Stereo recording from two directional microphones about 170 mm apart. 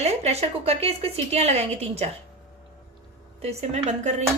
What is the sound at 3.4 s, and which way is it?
Speech, 40° right (ahead or behind).